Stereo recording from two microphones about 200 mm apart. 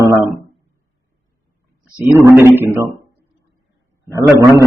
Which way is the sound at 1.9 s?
10° right (ahead or behind).